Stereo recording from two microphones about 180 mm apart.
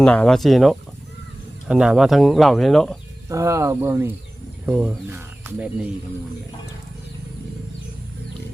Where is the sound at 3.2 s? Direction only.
15° right (ahead or behind).